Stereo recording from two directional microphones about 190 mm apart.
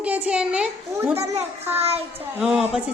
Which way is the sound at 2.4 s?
Centre (ahead or behind).